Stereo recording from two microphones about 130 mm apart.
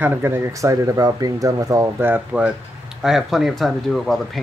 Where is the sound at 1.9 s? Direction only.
15° right (ahead or behind).